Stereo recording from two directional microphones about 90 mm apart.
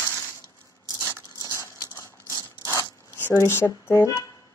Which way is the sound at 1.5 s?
40° left (ahead or behind).